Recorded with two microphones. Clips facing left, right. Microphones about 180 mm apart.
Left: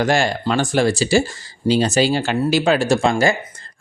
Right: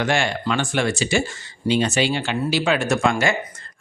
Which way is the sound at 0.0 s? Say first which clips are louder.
Left 4 dB; 40° left (ahead or behind).